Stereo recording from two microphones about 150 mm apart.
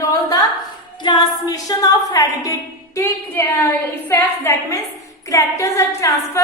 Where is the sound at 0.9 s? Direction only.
30° left (ahead or behind).